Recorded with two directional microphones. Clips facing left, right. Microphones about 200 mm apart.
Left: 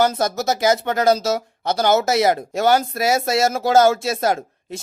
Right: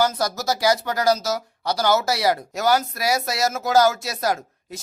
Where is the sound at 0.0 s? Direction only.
25° left (ahead or behind).